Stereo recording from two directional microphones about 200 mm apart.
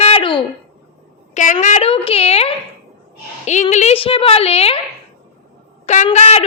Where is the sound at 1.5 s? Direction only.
30° left (ahead or behind).